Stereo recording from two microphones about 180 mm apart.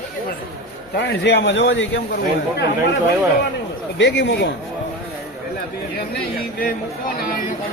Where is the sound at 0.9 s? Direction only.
70° left (ahead or behind).